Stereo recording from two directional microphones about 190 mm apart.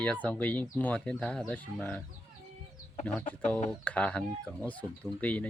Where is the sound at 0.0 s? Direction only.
5° left (ahead or behind).